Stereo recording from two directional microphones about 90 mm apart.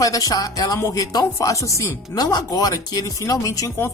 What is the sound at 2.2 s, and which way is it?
Speech, 50° left (ahead or behind).